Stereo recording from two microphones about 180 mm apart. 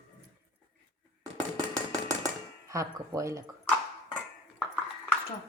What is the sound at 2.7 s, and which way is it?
Speech, 15° right (ahead or behind).